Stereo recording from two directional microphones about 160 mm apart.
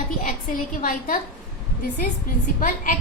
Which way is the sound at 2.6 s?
55° left (ahead or behind).